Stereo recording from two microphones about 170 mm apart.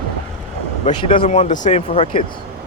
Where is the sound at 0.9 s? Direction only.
30° left (ahead or behind).